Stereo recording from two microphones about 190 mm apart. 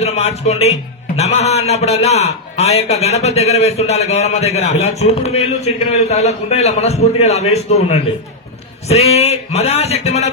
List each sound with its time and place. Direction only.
0.0 s a man's voice: 35° left (ahead or behind)